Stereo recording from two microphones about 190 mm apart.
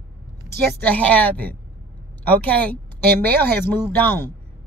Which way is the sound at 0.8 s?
5° left (ahead or behind).